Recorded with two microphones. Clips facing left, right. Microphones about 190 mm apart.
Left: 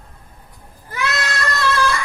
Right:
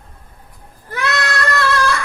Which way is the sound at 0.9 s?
60° right (ahead or behind).